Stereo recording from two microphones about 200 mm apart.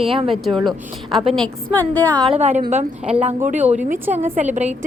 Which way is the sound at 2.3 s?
35° right (ahead or behind).